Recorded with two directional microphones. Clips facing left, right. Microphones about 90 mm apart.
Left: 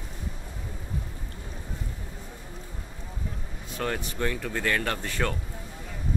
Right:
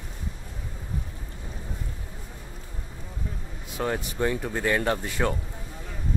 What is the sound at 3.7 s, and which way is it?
Speech, 15° right (ahead or behind).